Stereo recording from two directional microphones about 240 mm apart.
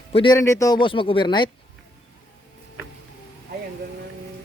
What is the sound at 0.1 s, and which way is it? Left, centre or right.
A man's voice, centre.